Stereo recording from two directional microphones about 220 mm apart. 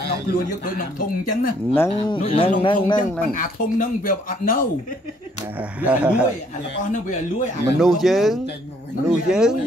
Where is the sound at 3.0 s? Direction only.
40° left (ahead or behind).